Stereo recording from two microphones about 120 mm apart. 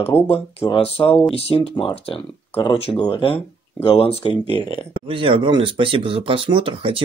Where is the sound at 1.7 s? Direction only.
50° left (ahead or behind).